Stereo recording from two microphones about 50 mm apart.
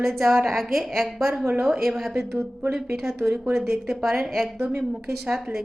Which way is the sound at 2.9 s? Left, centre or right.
Centre.